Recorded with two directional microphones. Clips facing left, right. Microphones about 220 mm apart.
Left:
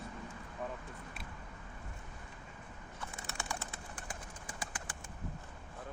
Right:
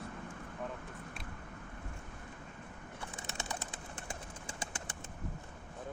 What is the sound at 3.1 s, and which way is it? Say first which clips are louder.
Bird: even; 20° right (ahead or behind).